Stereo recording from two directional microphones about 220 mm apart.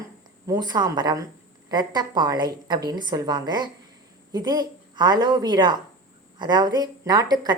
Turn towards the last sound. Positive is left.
turn(degrees=-20)  # may be behind; listen again after turning